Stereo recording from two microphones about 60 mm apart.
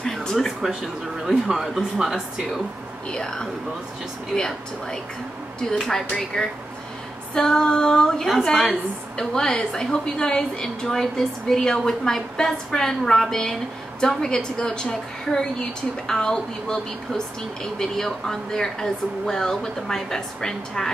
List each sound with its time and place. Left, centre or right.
0.0 s a sound: centre
1.2 s speech: centre
3.1 s a woman's voice: centre